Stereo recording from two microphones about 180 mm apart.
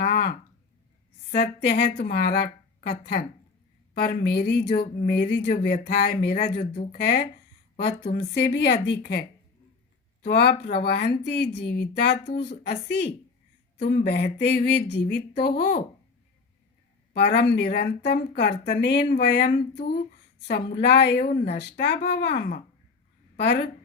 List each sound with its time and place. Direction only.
0.0 s a sound: 60° left (ahead or behind)
1.3 s speech: 60° left (ahead or behind)
10.2 s speech: 65° left (ahead or behind)
13.8 s speech: 55° left (ahead or behind)
17.2 s speech: 60° left (ahead or behind)
22.4 s speech: 55° left (ahead or behind)
23.4 s speech: 65° left (ahead or behind)